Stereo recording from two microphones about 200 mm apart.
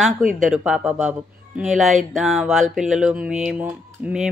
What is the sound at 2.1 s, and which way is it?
Speech, centre (ahead or behind).